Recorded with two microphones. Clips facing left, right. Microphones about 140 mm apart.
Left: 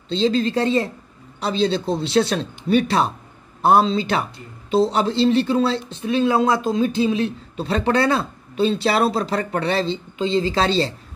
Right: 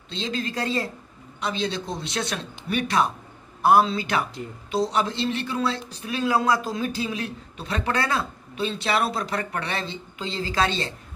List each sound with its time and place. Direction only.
0.1 s speech: 30° left (ahead or behind)